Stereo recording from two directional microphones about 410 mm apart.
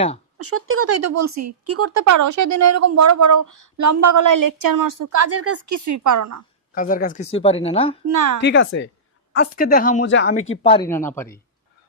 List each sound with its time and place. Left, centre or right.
0.3 s speech: right
6.7 s speech: centre
8.0 s a woman's voice: right
8.4 s a woman's voice: left; by 11.3 s centre